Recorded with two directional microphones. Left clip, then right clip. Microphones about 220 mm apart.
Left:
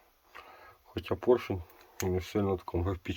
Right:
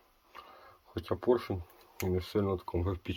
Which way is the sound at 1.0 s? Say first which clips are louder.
Left 2 dB; 15° left (ahead or behind).